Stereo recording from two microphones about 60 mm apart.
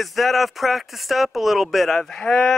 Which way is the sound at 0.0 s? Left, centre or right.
Centre.